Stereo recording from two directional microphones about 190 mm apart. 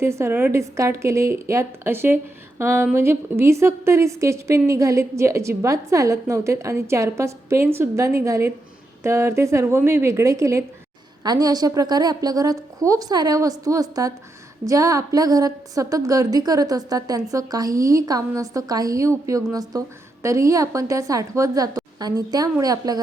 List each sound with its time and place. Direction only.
0.0 s a woman's voice: 15° right (ahead or behind)